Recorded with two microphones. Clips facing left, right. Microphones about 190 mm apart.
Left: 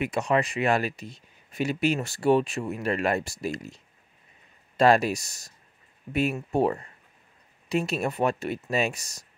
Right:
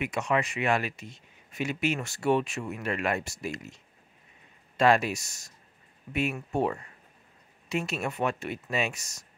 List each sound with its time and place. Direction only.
0.0 s speech: 35° left (ahead or behind)